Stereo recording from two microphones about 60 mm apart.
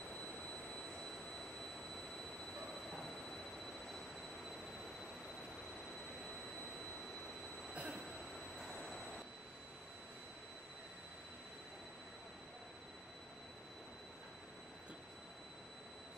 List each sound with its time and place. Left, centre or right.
7.7 s train: right
8.5 s train: centre